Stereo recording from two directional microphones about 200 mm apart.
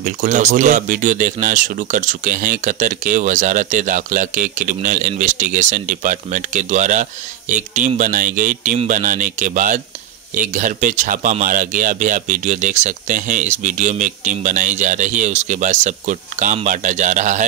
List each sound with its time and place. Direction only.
0.0 s speech: 40° right (ahead or behind)